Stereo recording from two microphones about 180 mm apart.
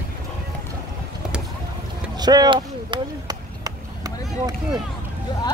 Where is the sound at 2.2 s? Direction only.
20° right (ahead or behind).